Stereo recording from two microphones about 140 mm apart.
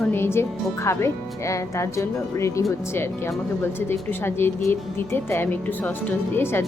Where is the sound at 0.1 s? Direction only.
15° left (ahead or behind).